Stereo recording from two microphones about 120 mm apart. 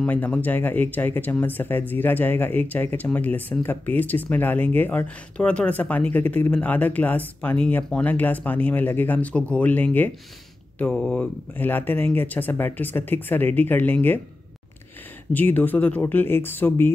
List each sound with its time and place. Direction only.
0.0 s speech: 10° left (ahead or behind)
15.3 s speech: 15° left (ahead or behind)